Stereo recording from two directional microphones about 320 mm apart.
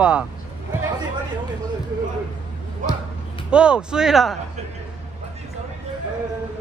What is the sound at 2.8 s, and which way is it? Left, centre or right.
Speech, right.